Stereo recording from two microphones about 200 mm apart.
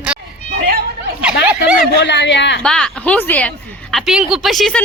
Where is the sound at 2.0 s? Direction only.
60° left (ahead or behind).